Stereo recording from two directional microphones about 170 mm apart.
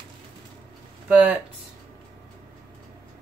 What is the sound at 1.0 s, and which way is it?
Speech, 10° right (ahead or behind).